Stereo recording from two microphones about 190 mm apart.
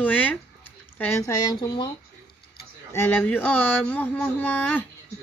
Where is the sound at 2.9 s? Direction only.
10° left (ahead or behind).